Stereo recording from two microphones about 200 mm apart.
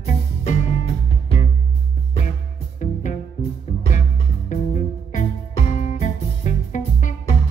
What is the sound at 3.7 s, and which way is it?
Music, 35° left (ahead or behind).